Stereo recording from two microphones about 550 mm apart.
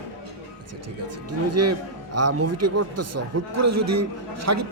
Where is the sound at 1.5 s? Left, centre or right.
Right.